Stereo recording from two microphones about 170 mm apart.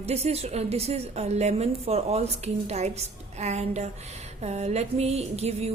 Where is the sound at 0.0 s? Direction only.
40° right (ahead or behind).